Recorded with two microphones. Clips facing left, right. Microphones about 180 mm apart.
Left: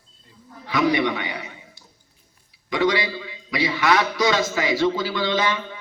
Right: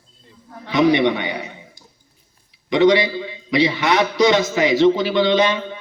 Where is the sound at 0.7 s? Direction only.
25° right (ahead or behind).